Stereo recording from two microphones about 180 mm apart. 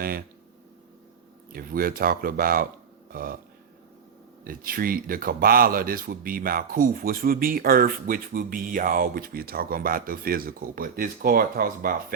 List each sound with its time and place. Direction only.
0.0 s speech: 55° right (ahead or behind)
1.5 s speech: 55° right (ahead or behind)
4.4 s speech: 55° right (ahead or behind)